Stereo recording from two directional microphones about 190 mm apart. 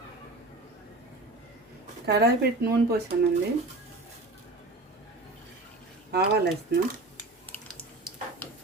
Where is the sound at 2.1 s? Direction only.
55° right (ahead or behind).